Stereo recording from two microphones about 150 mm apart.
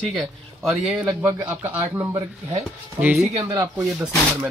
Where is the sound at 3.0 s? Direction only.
10° right (ahead or behind).